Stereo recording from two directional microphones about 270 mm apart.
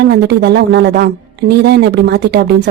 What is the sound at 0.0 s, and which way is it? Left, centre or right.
A woman's voice, right.